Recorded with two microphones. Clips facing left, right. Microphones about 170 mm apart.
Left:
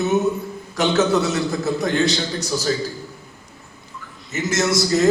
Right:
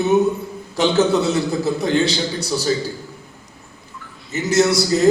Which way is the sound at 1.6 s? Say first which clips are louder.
Right 2 dB; 30° right (ahead or behind).